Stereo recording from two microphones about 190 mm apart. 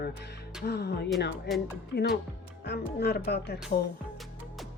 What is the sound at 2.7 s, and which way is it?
Speech, 60° left (ahead or behind).